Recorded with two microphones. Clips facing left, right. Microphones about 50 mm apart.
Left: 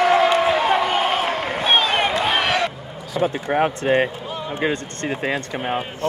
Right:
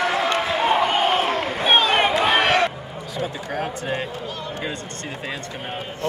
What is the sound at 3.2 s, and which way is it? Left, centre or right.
Speech, left.